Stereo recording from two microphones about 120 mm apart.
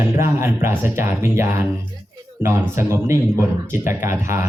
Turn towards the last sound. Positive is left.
turn(degrees=-20)  # may be behind; listen again after turning